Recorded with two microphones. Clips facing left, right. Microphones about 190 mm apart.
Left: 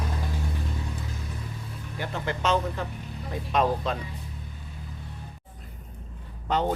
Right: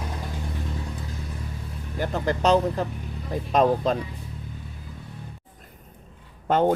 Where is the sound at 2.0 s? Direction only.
40° right (ahead or behind).